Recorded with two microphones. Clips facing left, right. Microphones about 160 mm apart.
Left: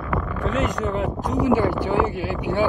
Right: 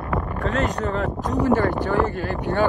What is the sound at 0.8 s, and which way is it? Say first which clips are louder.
Speech: even; 15° left (ahead or behind).